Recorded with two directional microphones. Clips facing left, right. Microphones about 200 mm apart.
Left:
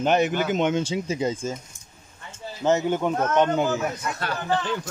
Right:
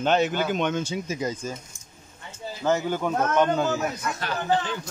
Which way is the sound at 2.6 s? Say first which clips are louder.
Left 3 dB; 20° left (ahead or behind).